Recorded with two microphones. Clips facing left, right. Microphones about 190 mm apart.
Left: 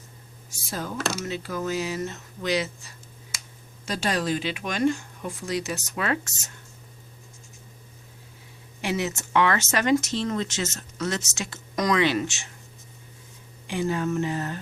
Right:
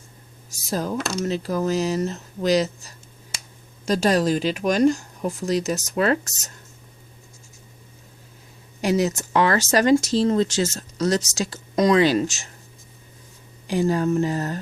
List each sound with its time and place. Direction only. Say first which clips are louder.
0.5 s speech: right 7 dB; 40° right (ahead or behind)
8.8 s speech: right 7 dB; 40° right (ahead or behind)
13.7 s speech: right 5 dB; 40° right (ahead or behind)